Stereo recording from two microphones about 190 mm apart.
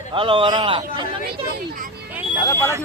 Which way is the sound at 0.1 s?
25° right (ahead or behind).